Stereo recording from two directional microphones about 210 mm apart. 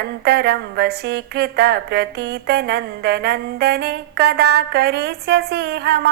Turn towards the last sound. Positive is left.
turn(degrees=-50)  # may be behind; listen again after turning